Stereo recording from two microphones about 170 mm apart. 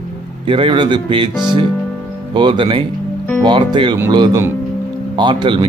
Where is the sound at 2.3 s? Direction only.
30° right (ahead or behind).